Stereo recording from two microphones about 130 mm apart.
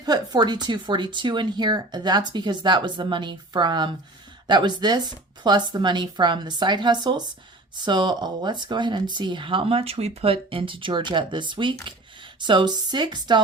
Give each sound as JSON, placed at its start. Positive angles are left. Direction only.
{"t": 0.0, "sound": "speech", "side_deg": -30}